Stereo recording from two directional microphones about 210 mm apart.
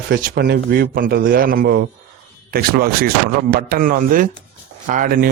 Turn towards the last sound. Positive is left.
turn(degrees=-40)  # may be behind; listen again after turning